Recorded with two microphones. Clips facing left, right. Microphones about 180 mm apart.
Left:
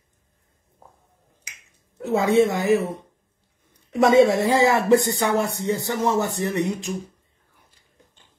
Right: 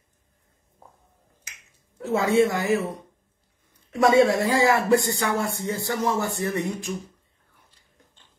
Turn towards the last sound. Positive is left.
turn(degrees=20)  # may be behind; listen again after turning